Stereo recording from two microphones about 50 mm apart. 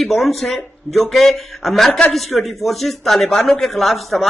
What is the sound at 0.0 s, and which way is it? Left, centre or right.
A man's voice, centre.